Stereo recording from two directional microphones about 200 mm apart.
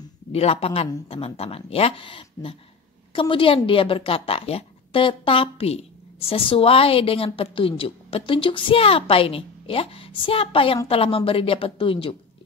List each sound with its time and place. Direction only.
0.3 s speech: 30° left (ahead or behind)